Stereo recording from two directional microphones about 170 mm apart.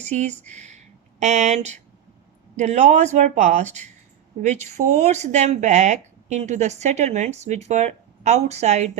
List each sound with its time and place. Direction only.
0.0 s a woman's voice: 45° right (ahead or behind)